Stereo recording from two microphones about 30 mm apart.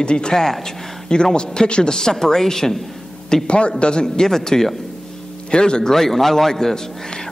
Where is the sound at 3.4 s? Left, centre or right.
Left.